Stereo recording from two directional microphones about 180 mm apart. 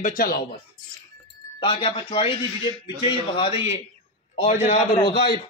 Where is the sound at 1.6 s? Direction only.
30° left (ahead or behind).